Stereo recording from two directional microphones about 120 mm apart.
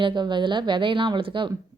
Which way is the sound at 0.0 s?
40° right (ahead or behind).